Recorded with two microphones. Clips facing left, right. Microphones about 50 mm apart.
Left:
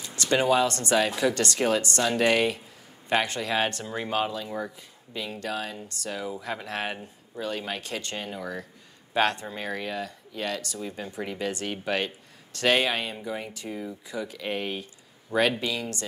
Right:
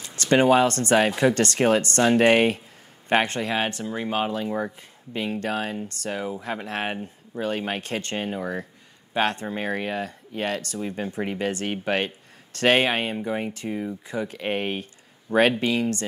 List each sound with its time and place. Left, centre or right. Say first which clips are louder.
0.0 s speech: right 5 dB; right
3.5 s speech: left 3 dB; centre
4.3 s speech: right 5 dB; right